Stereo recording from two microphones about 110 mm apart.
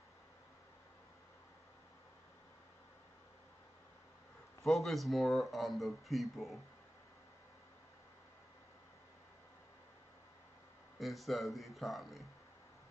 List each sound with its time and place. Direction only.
4.6 s speech: centre (ahead or behind)
11.0 s speech: centre (ahead or behind)